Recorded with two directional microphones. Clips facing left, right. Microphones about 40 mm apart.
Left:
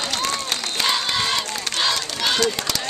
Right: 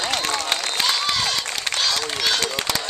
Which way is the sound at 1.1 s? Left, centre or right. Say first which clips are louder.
Left 1 dB; centre.